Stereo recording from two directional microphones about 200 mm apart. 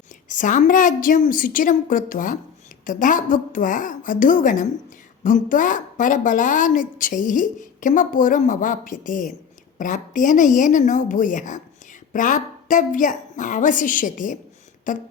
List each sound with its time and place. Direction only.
0.3 s a woman's voice: 40° left (ahead or behind)